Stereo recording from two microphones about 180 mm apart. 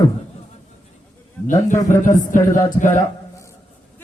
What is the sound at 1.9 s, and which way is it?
Speech, 45° left (ahead or behind).